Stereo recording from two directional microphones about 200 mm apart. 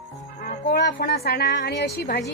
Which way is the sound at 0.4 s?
50° left (ahead or behind).